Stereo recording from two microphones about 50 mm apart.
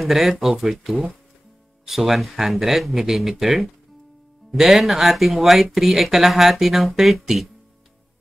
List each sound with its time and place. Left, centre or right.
0.0 s speech: centre